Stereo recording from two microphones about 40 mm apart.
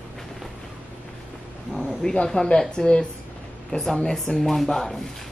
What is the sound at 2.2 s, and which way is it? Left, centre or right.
Speech, centre.